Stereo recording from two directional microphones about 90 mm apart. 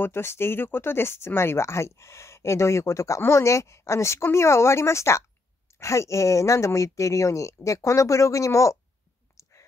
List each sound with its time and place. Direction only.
0.0 s speech: 25° left (ahead or behind)
9.4 s clicking: 35° left (ahead or behind)